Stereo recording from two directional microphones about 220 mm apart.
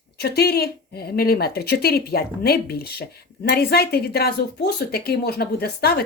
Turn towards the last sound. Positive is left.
turn(degrees=45)  # may be behind; listen again after turning